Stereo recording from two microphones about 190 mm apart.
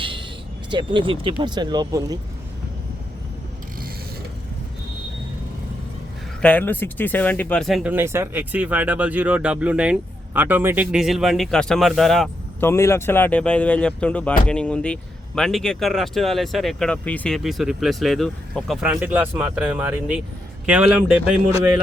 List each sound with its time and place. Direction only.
0.0 s a sound: 25° right (ahead or behind)
0.7 s speech: 25° right (ahead or behind)
6.4 s speech: 10° left (ahead or behind)
7.9 s speech: 15° right (ahead or behind)
12.6 s speech: 15° left (ahead or behind); by 21.7 s 5° right (ahead or behind)